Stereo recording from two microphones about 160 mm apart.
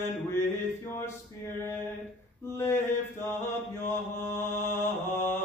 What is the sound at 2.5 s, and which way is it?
Mantra, 15° left (ahead or behind).